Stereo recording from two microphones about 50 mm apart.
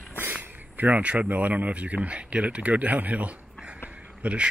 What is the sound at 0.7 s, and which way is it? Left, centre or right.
Speech, right.